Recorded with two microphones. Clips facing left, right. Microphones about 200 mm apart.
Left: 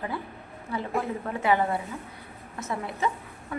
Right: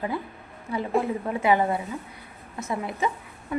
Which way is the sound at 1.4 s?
15° right (ahead or behind).